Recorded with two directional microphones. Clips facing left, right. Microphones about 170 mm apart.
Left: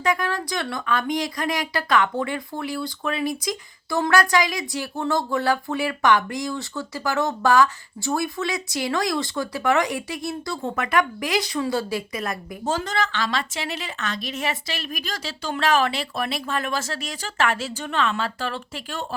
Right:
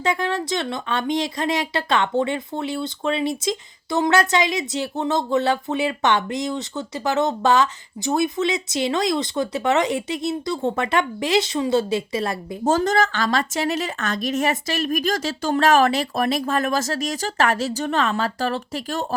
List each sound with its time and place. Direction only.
0.0 s speech: 25° right (ahead or behind)
12.6 s a woman's voice: 45° right (ahead or behind)